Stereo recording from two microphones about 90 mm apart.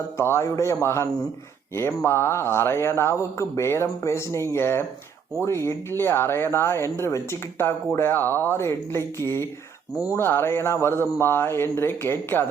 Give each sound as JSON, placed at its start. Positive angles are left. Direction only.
{"t": 0.2, "sound": "speech", "side_deg": 30}
{"t": 2.0, "sound": "speech", "side_deg": 30}